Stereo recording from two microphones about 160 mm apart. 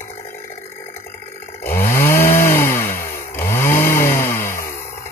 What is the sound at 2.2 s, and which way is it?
Chainsaw, 15° left (ahead or behind).